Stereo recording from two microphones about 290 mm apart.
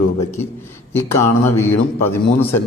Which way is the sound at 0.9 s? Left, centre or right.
Centre.